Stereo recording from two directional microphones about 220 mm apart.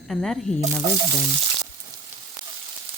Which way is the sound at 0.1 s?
Centre (ahead or behind).